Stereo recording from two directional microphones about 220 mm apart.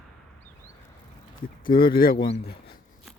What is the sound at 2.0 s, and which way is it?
Speech, 40° left (ahead or behind).